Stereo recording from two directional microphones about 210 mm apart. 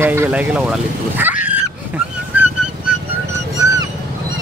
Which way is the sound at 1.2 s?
10° right (ahead or behind).